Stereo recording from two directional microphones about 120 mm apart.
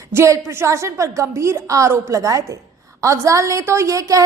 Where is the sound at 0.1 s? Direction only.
20° right (ahead or behind).